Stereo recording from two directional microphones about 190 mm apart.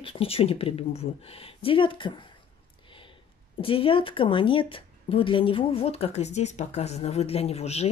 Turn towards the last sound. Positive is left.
turn(degrees=35)  # may be behind; listen again after turning